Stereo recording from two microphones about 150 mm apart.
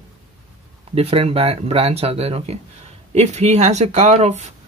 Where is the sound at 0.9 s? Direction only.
40° right (ahead or behind).